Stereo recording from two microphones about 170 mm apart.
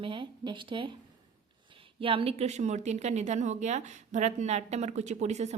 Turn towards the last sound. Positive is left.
turn(degrees=-40)  # may be behind; listen again after turning